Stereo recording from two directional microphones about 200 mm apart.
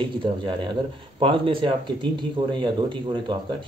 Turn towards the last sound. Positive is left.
turn(degrees=-25)  # may be behind; listen again after turning